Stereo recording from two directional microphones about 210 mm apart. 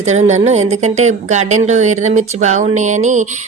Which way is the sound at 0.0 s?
35° right (ahead or behind).